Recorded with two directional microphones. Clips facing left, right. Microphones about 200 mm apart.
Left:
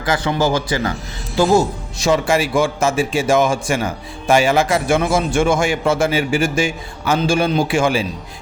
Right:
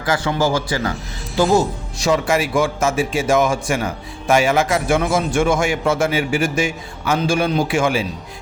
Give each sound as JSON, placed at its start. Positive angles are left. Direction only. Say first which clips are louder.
{"t": 0.0, "sound": "a man's voice", "louder": "left 1 dB", "side_deg": 20}
{"t": 2.0, "sound": "a man's voice", "louder": "left 1 dB", "side_deg": 30}